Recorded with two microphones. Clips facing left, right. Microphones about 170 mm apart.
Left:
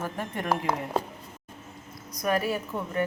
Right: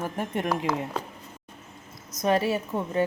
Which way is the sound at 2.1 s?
25° right (ahead or behind).